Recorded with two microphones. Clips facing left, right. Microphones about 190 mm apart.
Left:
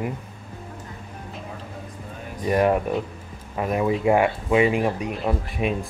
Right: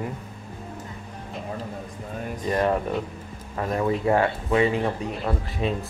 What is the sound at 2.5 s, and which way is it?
Speech, 15° left (ahead or behind).